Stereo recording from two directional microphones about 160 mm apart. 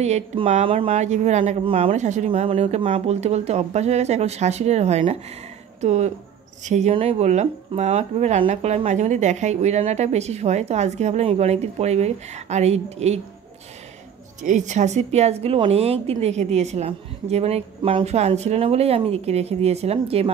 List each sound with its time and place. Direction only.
0.0 s speech: 45° right (ahead or behind)
14.4 s a woman's voice: 50° right (ahead or behind)